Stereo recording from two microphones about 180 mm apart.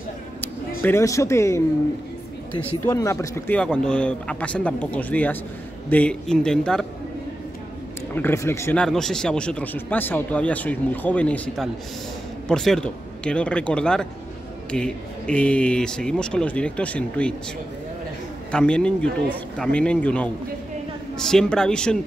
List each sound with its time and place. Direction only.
0.4 s speech: 10° left (ahead or behind)
2.8 s speech: 15° left (ahead or behind)
8.1 s speech: 10° left (ahead or behind)
8.8 s speech: 5° left (ahead or behind)
18.5 s speech: 5° left (ahead or behind)